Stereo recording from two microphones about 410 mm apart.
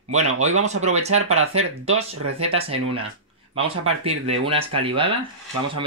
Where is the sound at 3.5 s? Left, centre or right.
Right.